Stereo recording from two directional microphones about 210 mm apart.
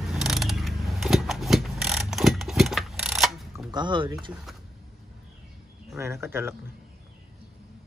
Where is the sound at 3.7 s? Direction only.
20° right (ahead or behind).